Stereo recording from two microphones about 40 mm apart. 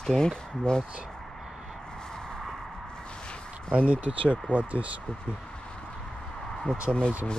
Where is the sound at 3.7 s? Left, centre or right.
Right.